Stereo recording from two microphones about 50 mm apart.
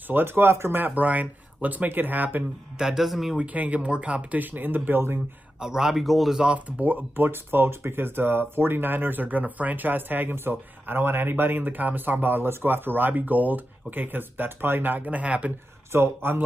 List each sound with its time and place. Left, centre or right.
0.1 s speech: right
0.8 s speech: right
2.8 s speech: centre
3.3 s speech: right
5.6 s speech: centre
6.3 s speech: centre
6.8 s speech: right
7.2 s speech: right
15.9 s speech: right